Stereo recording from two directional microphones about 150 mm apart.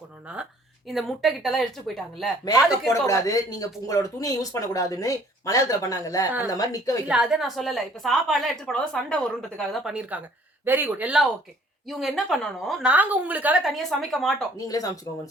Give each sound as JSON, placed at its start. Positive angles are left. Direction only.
{"t": 0.9, "sound": "a woman's voice", "side_deg": 0}
{"t": 2.9, "sound": "speech", "side_deg": 20}
{"t": 7.1, "sound": "a woman's voice", "side_deg": -5}
{"t": 14.7, "sound": "speech", "side_deg": 25}